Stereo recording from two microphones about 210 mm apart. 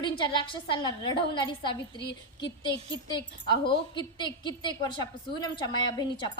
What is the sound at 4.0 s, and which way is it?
A woman's voice, 20° left (ahead or behind).